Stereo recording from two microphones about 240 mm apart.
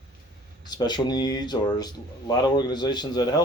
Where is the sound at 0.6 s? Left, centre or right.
Centre.